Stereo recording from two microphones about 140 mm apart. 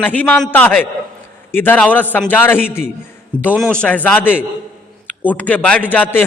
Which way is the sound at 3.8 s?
10° left (ahead or behind).